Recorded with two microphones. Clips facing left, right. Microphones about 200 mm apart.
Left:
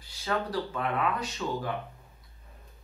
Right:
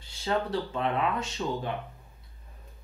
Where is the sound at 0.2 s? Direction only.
25° right (ahead or behind).